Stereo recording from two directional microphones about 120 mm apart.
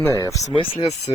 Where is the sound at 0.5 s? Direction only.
55° left (ahead or behind).